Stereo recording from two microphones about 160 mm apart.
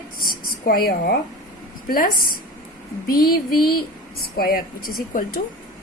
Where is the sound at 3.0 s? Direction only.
65° left (ahead or behind).